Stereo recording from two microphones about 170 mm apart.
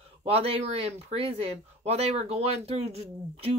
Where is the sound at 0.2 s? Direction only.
35° right (ahead or behind).